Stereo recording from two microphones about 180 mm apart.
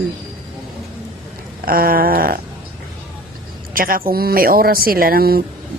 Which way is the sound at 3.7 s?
50° right (ahead or behind).